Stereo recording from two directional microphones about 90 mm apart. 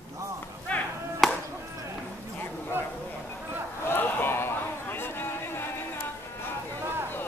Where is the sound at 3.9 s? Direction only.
20° left (ahead or behind).